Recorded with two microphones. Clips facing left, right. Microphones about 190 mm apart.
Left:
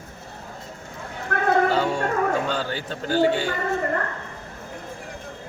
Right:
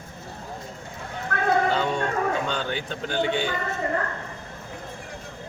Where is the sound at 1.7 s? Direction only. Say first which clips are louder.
Left 2 dB; 10° left (ahead or behind).